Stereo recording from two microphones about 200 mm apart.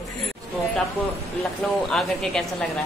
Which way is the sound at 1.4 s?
Centre (ahead or behind).